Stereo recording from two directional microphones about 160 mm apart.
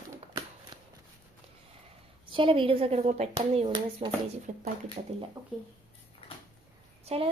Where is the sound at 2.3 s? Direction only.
30° right (ahead or behind).